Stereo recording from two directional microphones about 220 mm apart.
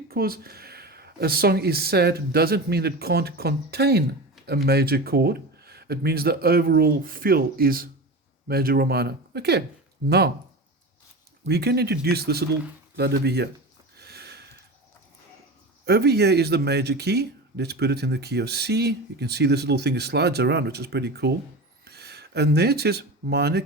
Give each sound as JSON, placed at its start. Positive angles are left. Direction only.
{"t": 0.1, "sound": "speech", "side_deg": -45}
{"t": 11.4, "sound": "speech", "side_deg": -50}
{"t": 13.9, "sound": "a sound", "side_deg": -45}
{"t": 15.9, "sound": "speech", "side_deg": -45}